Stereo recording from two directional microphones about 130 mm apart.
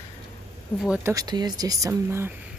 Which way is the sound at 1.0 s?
30° right (ahead or behind).